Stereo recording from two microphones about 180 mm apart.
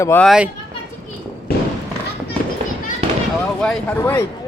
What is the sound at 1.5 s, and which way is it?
Fireworks, 60° left (ahead or behind).